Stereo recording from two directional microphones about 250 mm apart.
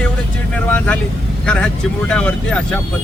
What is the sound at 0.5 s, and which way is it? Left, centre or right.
Speech, centre.